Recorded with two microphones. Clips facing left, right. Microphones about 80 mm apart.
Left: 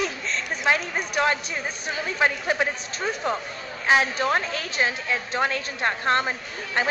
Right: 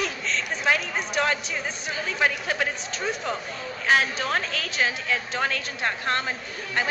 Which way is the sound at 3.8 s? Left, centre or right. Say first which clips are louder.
Left 2 dB; left.